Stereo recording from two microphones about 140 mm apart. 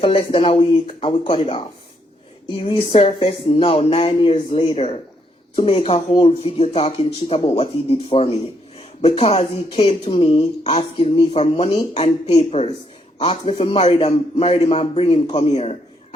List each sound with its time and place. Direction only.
0.0 s speech: 40° left (ahead or behind)
2.9 s speech: 50° left (ahead or behind)